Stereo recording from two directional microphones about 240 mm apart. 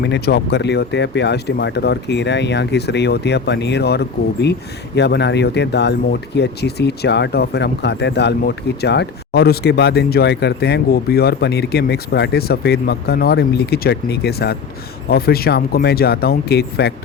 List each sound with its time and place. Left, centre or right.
0.0 s speech: left